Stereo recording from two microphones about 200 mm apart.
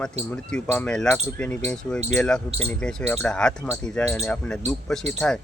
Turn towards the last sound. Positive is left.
turn(degrees=5)  # may be behind; listen again after turning